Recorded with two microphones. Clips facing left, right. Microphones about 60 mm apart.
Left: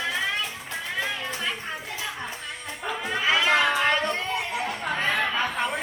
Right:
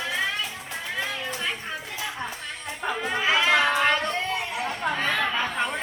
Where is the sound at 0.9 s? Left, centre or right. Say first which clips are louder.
Left 1 dB; centre.